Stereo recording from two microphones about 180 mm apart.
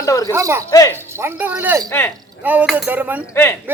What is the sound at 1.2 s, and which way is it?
Speech, 10° right (ahead or behind).